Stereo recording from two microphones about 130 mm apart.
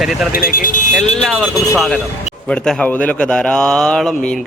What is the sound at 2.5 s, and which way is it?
Speech, 5° left (ahead or behind).